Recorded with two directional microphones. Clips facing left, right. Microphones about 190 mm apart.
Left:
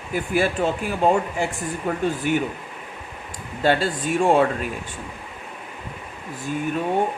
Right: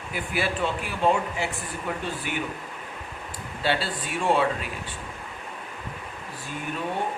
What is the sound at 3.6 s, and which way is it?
Speech, 45° left (ahead or behind).